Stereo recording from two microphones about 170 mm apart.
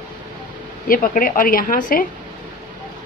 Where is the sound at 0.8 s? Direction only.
55° left (ahead or behind).